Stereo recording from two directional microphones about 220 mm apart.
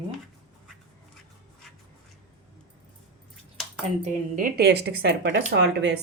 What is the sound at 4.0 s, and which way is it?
Speech, 35° right (ahead or behind).